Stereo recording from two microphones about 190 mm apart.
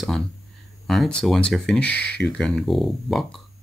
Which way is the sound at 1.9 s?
65° left (ahead or behind).